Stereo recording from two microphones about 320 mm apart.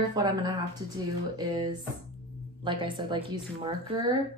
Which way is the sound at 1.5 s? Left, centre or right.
Centre.